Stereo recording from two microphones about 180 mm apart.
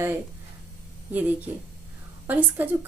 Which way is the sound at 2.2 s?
10° right (ahead or behind).